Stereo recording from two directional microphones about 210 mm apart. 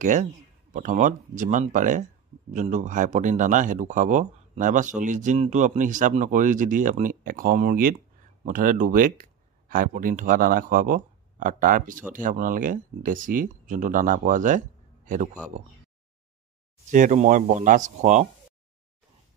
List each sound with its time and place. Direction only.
0.0 s a man's voice: 35° right (ahead or behind)
16.9 s speech: 35° right (ahead or behind)